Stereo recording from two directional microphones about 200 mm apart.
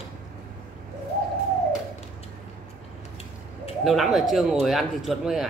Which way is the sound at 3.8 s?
Centre (ahead or behind).